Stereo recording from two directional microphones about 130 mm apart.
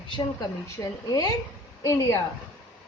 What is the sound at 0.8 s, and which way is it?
Speech, 20° left (ahead or behind).